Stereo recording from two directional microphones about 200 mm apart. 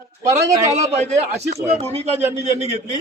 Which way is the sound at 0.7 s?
35° right (ahead or behind).